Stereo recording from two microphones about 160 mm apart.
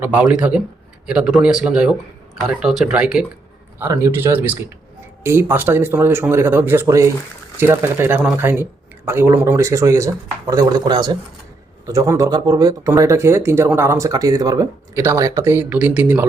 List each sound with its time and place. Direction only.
0.0 s speech: 10° right (ahead or behind)
3.8 s speech: 20° right (ahead or behind)